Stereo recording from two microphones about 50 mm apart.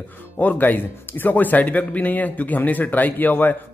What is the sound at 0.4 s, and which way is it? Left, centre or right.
Speech, left.